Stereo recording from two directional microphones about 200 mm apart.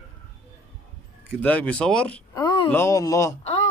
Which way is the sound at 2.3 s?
20° left (ahead or behind).